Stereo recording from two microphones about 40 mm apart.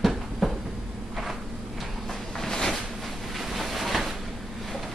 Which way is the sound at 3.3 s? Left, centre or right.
Centre.